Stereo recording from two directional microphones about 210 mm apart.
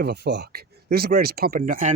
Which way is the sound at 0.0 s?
50° right (ahead or behind).